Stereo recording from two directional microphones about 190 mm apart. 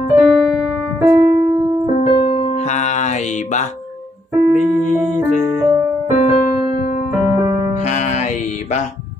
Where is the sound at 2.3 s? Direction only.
30° left (ahead or behind).